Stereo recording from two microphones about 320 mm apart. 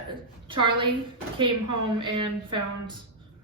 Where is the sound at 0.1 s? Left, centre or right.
Centre.